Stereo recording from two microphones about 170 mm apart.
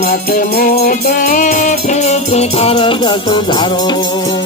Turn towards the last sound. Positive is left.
turn(degrees=25)  # may be behind; listen again after turning